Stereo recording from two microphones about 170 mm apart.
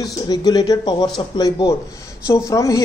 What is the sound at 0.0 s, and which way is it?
A woman's voice, 20° left (ahead or behind).